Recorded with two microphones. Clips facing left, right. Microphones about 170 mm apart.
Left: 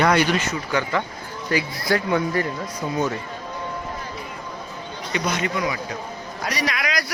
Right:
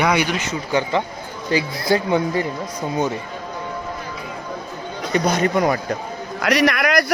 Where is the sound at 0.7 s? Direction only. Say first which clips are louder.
Right 7 dB; 25° right (ahead or behind).